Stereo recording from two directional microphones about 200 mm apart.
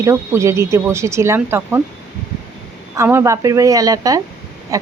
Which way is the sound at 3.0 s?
15° right (ahead or behind).